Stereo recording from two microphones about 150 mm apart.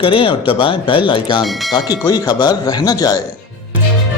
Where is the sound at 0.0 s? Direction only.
35° left (ahead or behind).